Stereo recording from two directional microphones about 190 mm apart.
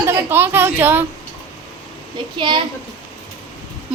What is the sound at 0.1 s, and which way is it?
Speech, 10° right (ahead or behind).